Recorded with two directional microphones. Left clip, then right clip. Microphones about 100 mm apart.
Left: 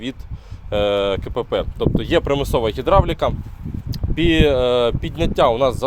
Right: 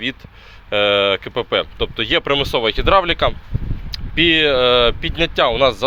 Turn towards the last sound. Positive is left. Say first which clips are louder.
# right 1 dB
turn(degrees=40)  # may be behind; listen again after turning